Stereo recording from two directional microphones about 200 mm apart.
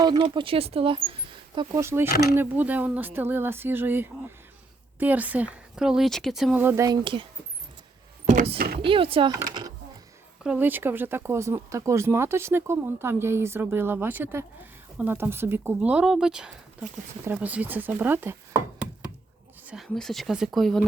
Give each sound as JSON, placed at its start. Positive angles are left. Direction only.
{"t": 0.0, "sound": "speech", "side_deg": -20}
{"t": 8.3, "sound": "speech", "side_deg": -40}
{"t": 8.8, "sound": "speech", "side_deg": -25}
{"t": 10.4, "sound": "speech", "side_deg": -5}
{"t": 19.6, "sound": "speech", "side_deg": 0}